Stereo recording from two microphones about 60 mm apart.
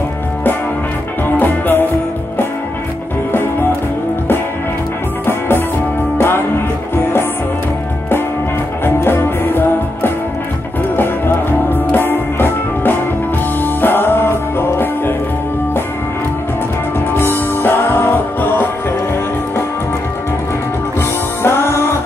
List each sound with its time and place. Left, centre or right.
1.4 s music: left
6.1 s music: left
8.8 s music: left
17.2 s music: left
21.4 s music: left